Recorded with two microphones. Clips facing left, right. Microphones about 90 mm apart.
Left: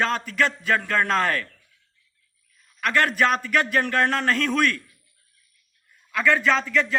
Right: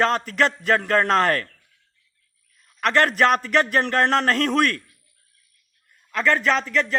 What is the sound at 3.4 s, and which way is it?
Speech, 35° right (ahead or behind).